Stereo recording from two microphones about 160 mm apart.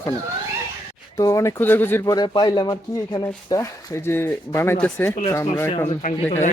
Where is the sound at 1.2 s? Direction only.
20° left (ahead or behind).